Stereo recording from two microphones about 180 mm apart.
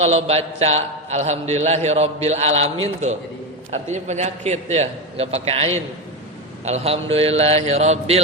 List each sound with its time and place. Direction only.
0.0 s a man's voice: 35° right (ahead or behind)